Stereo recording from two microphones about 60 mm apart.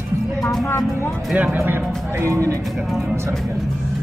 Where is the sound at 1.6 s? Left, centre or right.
Right.